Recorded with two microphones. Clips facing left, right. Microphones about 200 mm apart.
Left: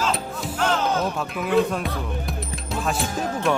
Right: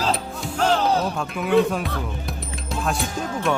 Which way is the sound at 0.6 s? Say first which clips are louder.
Right 3 dB; 35° right (ahead or behind).